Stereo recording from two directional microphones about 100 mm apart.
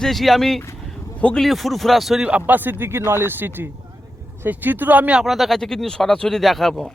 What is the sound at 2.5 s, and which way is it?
Speech, 20° right (ahead or behind).